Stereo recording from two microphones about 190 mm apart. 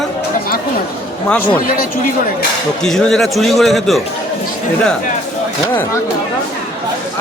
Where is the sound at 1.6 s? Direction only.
50° left (ahead or behind).